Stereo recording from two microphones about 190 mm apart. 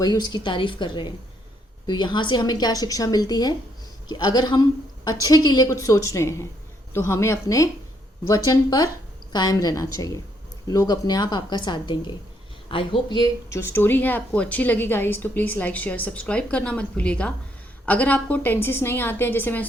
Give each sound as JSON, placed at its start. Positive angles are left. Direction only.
{"t": 0.0, "sound": "a woman's voice", "side_deg": 20}